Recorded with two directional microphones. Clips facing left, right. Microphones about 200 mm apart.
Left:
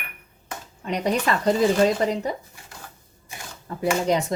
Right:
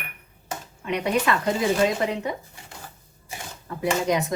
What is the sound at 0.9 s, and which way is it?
Speech, 40° left (ahead or behind).